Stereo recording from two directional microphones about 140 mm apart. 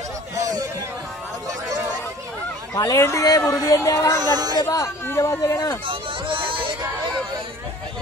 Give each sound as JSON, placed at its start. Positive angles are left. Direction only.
{"t": 0.4, "sound": "a sound", "side_deg": -25}
{"t": 2.7, "sound": "speech", "side_deg": 25}
{"t": 4.2, "sound": "speech", "side_deg": -30}
{"t": 4.6, "sound": "speech", "side_deg": 20}
{"t": 5.9, "sound": "music", "side_deg": -40}